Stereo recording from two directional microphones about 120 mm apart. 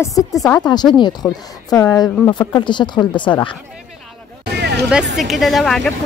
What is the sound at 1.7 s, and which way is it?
Speech, 30° left (ahead or behind).